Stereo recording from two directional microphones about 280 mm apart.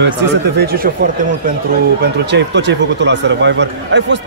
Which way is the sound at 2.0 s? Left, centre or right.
Right.